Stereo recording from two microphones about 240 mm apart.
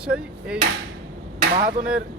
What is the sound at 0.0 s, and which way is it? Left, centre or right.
Speech, centre.